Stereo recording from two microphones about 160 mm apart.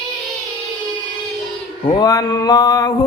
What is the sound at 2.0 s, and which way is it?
Mantra, 25° left (ahead or behind).